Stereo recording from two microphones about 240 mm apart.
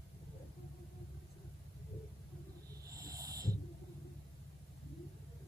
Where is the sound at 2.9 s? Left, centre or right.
Centre.